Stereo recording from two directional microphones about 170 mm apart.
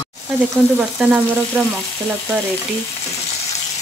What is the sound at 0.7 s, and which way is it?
Frying, 5° right (ahead or behind).